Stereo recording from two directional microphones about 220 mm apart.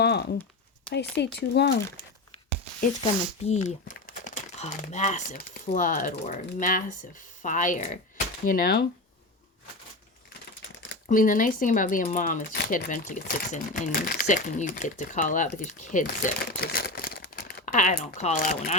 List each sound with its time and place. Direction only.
0.0 s a sound: 50° left (ahead or behind)
0.9 s speech: 50° left (ahead or behind)
3.4 s speech: 30° left (ahead or behind)
11.0 s speech: 35° left (ahead or behind)